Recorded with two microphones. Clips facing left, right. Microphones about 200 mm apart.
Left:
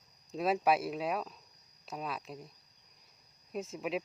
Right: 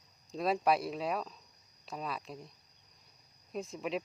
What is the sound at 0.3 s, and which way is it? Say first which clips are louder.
Speech: left 1 dB; 5° left (ahead or behind).